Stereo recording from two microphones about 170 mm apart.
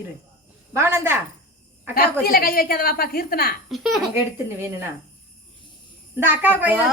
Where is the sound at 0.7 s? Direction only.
15° right (ahead or behind).